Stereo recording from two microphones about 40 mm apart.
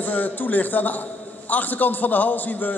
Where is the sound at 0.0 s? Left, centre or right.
Left.